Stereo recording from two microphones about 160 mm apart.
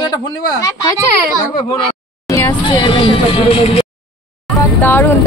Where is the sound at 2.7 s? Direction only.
30° left (ahead or behind).